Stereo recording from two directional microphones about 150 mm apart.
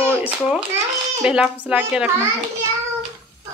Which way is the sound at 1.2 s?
5° right (ahead or behind).